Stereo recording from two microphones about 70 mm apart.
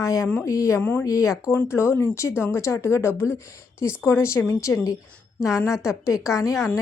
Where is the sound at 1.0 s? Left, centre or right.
Left.